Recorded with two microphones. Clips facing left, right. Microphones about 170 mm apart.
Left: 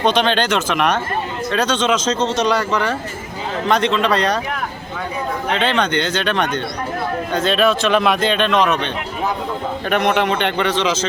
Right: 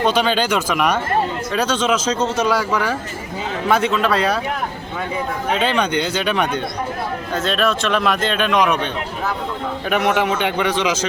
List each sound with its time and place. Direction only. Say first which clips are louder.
0.0 s a man's voice: left 1 dB; 5° right (ahead or behind)
5.5 s a man's voice: even; 10° right (ahead or behind)
10.2 s speech: left 1 dB; 5° right (ahead or behind)